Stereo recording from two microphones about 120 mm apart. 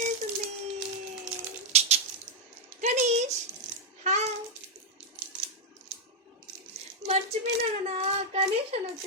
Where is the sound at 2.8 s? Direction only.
85° right.